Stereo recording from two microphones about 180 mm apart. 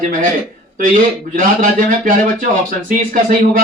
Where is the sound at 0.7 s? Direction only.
50° right (ahead or behind).